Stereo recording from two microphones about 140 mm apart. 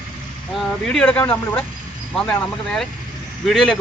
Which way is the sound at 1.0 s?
10° left (ahead or behind).